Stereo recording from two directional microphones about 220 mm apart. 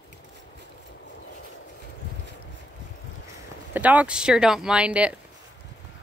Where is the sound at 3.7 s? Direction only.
5° right (ahead or behind).